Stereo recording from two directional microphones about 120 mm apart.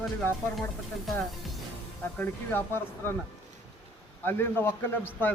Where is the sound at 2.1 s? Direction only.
15° left (ahead or behind).